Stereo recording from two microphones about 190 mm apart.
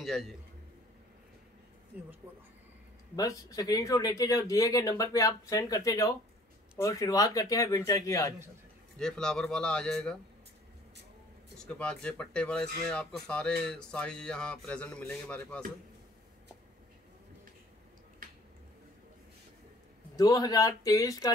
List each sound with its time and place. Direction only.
0.0 s a man's voice: centre (ahead or behind)
3.2 s speech: 20° left (ahead or behind)
8.9 s speech: 5° left (ahead or behind)
11.5 s speech: 5° left (ahead or behind)
20.2 s speech: 20° left (ahead or behind)